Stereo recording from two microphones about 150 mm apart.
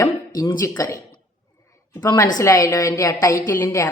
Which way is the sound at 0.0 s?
25° left (ahead or behind).